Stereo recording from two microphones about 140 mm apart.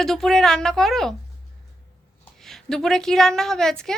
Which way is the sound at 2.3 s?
5° left (ahead or behind).